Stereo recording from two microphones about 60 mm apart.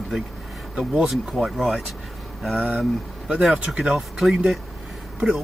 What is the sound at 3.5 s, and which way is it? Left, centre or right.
Speech, centre.